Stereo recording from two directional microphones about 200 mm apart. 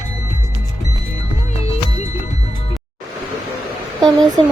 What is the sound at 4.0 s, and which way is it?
Speech, 20° right (ahead or behind).